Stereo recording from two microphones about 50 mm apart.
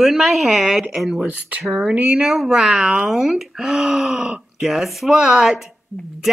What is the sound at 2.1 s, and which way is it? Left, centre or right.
A woman's voice, centre.